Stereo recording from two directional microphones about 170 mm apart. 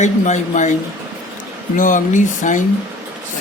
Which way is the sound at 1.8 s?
50° left (ahead or behind).